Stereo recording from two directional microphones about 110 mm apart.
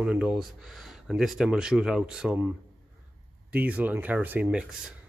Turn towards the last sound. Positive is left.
turn(degrees=-10)  # may be behind; listen again after turning